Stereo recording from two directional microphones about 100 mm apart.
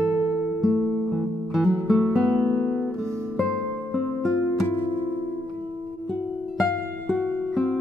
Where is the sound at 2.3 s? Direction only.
20° left (ahead or behind).